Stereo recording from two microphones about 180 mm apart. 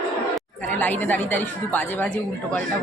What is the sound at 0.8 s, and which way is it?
A woman's voice, 10° left (ahead or behind).